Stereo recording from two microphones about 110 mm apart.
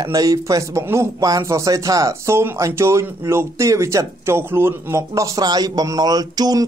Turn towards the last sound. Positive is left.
turn(degrees=-35)  # may be behind; listen again after turning